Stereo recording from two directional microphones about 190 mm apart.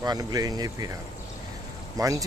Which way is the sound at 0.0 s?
20° right (ahead or behind).